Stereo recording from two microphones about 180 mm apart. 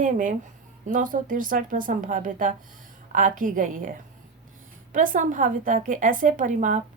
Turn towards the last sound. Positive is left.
turn(degrees=-45)  # may be behind; listen again after turning